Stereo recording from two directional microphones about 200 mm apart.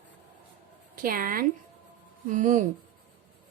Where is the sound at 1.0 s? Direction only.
45° right (ahead or behind).